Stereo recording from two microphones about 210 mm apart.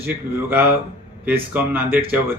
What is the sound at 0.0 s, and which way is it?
Speech, 10° right (ahead or behind).